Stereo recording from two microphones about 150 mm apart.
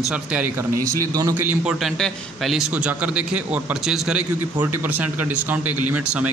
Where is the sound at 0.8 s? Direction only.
20° right (ahead or behind).